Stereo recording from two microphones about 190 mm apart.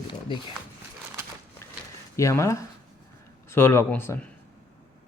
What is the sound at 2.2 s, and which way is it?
A man's voice, 15° left (ahead or behind).